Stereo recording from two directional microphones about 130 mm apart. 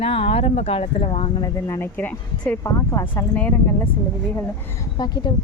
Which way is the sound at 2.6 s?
25° left (ahead or behind).